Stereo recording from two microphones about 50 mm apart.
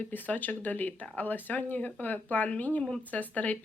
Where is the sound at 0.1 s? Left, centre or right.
Left.